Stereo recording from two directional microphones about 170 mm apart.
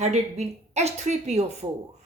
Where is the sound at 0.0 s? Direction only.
40° right (ahead or behind).